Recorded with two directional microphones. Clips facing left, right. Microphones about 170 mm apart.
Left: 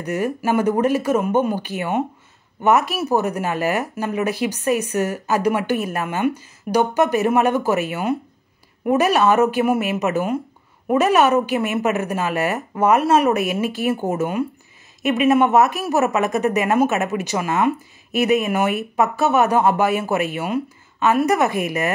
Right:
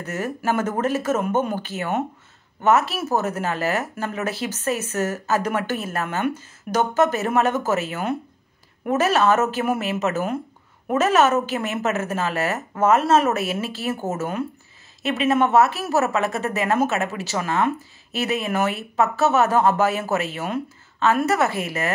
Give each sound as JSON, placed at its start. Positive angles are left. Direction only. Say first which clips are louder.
{"t": 0.0, "sound": "speech", "louder": "left 4 dB", "side_deg": 15}